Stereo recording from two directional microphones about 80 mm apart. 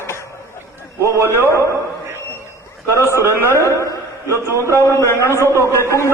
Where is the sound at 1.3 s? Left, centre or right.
Left.